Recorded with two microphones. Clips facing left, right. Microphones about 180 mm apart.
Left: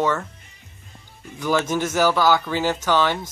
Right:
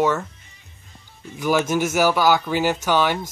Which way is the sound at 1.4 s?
10° right (ahead or behind).